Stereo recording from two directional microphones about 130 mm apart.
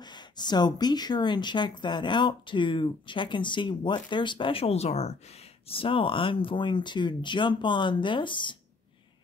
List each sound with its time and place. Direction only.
0.0 s speech: 35° left (ahead or behind)